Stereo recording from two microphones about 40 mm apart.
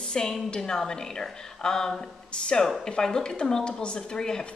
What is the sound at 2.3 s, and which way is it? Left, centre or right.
A woman's voice, left.